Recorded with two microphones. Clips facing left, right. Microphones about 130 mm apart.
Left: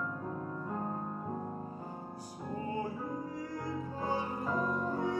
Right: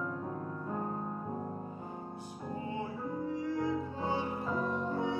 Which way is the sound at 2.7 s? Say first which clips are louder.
Left 1 dB; 40° left (ahead or behind).